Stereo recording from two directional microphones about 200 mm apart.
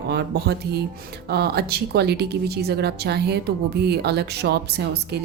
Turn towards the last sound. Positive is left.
turn(degrees=-55)  # may be behind; listen again after turning